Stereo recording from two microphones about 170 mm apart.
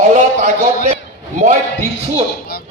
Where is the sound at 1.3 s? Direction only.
50° right (ahead or behind).